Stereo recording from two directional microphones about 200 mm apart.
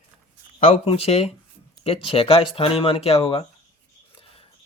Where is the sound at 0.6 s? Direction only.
30° left (ahead or behind).